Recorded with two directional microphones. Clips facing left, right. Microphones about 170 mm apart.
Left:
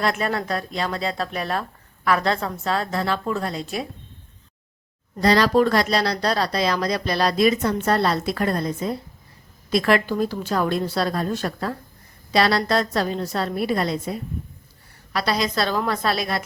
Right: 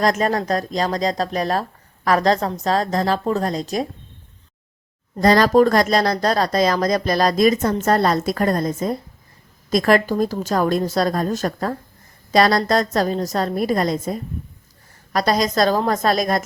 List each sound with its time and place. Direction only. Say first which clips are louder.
0.0 s speech: right 5 dB; 40° right (ahead or behind)
5.2 s speech: right 4 dB; 45° right (ahead or behind)